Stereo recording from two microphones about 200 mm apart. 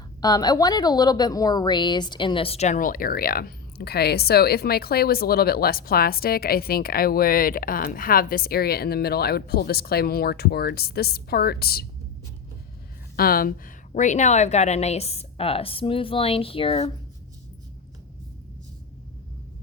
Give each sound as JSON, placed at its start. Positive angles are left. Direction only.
{"t": 0.2, "sound": "a woman's voice", "side_deg": 20}
{"t": 13.1, "sound": "a woman's voice", "side_deg": 45}